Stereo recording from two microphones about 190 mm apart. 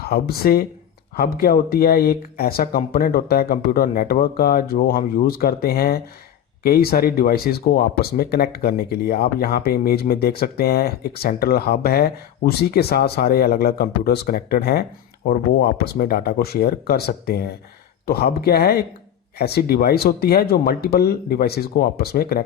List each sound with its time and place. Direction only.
0.0 s speech: 55° left (ahead or behind)